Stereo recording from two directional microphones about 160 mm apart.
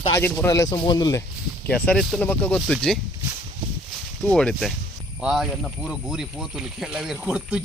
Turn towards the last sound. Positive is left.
turn(degrees=-5)  # may be behind; listen again after turning